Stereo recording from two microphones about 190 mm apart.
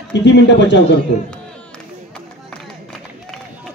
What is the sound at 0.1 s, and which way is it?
Speech, 70° left (ahead or behind).